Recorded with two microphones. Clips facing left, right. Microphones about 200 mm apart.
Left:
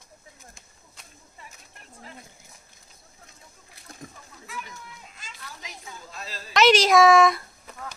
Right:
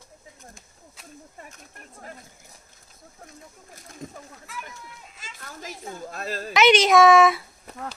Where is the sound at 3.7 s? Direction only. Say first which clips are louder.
Right 4 dB; 45° right (ahead or behind).